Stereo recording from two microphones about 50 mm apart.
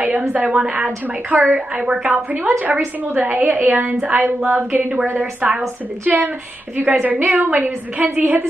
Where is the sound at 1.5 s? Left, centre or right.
Right.